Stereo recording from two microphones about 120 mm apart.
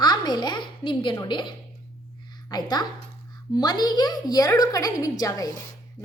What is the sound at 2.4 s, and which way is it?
A woman's voice, 35° left (ahead or behind).